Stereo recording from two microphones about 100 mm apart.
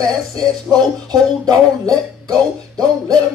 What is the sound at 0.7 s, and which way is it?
Speech, 15° right (ahead or behind).